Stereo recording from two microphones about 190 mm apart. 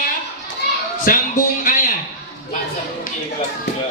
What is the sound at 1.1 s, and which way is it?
Speech, 45° left (ahead or behind).